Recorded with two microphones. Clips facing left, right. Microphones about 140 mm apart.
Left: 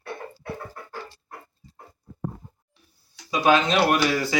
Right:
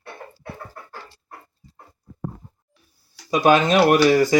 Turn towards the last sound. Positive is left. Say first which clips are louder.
# right 7 dB
turn(degrees=-45)  # may be behind; listen again after turning